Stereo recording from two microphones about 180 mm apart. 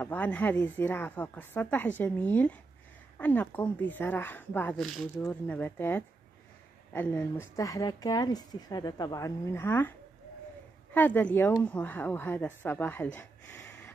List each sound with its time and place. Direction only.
0.0 s a woman's voice: 10° left (ahead or behind)